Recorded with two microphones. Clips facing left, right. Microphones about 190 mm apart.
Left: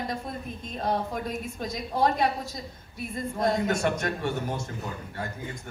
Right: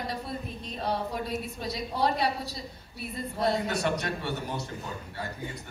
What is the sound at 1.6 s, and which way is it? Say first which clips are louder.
A woman's voice: left 4 dB; 45° left (ahead or behind).